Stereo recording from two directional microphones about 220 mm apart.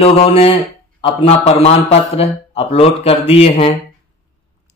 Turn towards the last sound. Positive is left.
turn(degrees=25)  # may be behind; listen again after turning